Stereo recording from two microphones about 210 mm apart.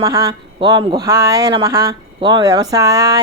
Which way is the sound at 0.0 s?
15° right (ahead or behind).